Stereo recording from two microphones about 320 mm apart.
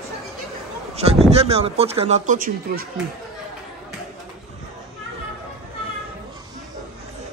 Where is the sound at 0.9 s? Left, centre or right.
Centre.